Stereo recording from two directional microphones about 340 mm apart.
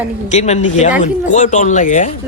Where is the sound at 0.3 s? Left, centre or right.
Centre.